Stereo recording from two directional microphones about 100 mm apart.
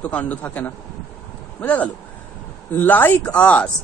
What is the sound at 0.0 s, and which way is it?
A man's voice, 15° left (ahead or behind).